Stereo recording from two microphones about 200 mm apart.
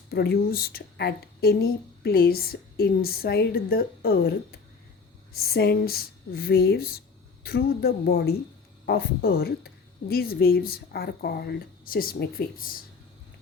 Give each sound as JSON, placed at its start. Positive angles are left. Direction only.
{"t": 0.1, "sound": "a woman's voice", "side_deg": 50}